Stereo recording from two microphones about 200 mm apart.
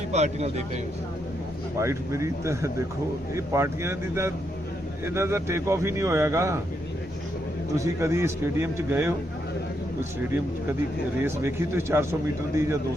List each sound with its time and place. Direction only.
0.1 s a man's voice: 35° right (ahead or behind)
1.8 s speech: 15° right (ahead or behind)
7.8 s speech: 15° right (ahead or behind)
11.2 s speech: 10° right (ahead or behind)